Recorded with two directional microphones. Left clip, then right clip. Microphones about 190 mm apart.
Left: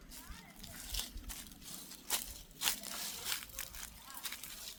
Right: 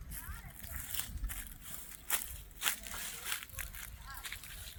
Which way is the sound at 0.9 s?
15° left (ahead or behind).